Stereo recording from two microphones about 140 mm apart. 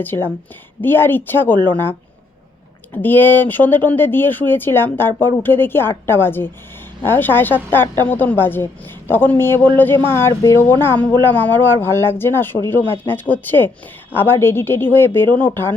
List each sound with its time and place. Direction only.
0.0 s speech: 15° left (ahead or behind)